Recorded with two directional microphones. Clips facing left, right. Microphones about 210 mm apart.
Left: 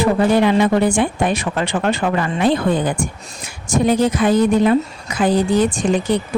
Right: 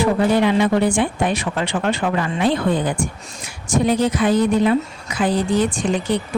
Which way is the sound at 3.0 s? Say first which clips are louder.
Left 1 dB; 45° left (ahead or behind).